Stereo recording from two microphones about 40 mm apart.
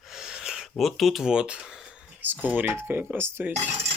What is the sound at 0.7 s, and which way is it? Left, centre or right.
Speech, centre.